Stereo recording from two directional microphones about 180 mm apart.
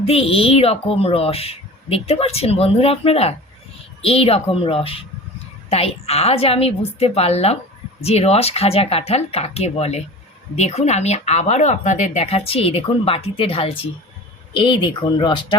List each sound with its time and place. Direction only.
0.0 s speech: 35° left (ahead or behind)